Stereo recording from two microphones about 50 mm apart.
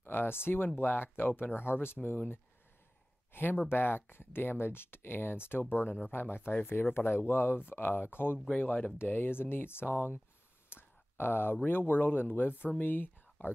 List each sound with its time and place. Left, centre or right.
0.0 s speech: left
3.3 s speech: left
8.5 s speech: left
10.7 s a sound: left
11.6 s speech: left